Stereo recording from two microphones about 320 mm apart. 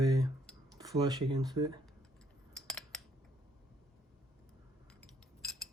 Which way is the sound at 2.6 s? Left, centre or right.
Centre.